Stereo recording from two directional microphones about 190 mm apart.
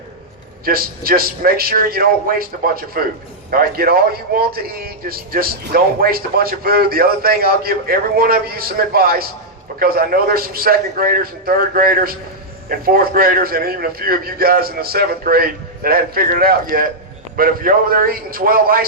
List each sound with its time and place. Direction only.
0.6 s speech: 50° right (ahead or behind)